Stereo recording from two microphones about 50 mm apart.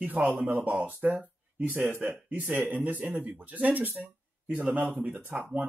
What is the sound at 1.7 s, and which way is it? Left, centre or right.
Speech, right.